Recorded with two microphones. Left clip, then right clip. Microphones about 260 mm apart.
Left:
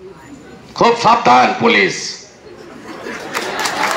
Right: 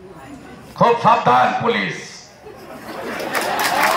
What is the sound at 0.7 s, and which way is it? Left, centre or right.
A man's voice, left.